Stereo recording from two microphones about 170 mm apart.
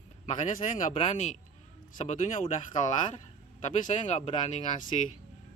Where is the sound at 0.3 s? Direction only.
40° left (ahead or behind).